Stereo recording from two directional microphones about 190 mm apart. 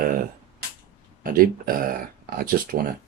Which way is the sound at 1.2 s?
45° right (ahead or behind).